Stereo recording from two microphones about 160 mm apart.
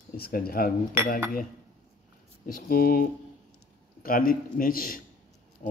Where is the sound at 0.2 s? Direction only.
70° left (ahead or behind).